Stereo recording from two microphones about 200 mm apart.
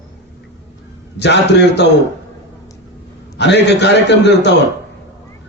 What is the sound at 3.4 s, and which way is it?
A man's voice, 60° left (ahead or behind).